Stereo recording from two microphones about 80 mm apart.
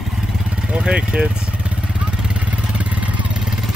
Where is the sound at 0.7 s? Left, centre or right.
Centre.